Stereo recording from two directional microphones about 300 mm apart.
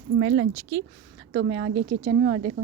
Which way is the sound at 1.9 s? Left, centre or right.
Centre.